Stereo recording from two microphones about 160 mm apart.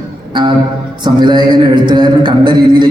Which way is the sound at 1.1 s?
25° right (ahead or behind).